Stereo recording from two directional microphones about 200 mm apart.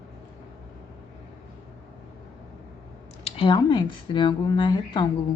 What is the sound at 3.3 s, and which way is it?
Speech, 25° left (ahead or behind).